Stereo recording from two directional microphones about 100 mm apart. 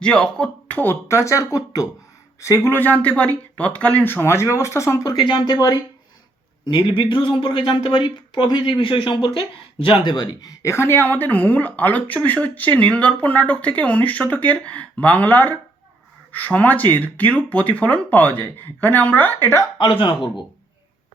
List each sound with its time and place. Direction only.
0.0 s speech: 10° left (ahead or behind)
1.0 s speech: 30° left (ahead or behind)
5.2 s speech: 50° left (ahead or behind)
6.7 s speech: 55° left (ahead or behind); by 19.6 s 20° left (ahead or behind)
19.8 s speech: 55° left (ahead or behind)